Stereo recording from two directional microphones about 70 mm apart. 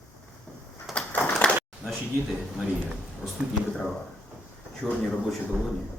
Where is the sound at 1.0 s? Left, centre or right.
Left.